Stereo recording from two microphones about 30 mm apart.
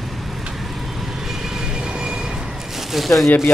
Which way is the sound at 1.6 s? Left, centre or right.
Right.